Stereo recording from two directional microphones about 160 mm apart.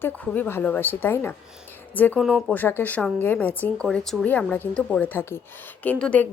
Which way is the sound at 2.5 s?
10° left (ahead or behind).